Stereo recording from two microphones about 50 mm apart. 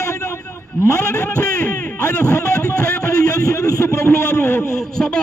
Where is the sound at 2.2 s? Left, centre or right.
Left.